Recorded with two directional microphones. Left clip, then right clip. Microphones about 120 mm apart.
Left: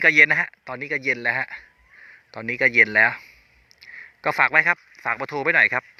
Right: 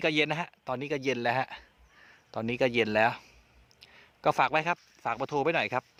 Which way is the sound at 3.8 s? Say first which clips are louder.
Left 3 dB; 15° right (ahead or behind).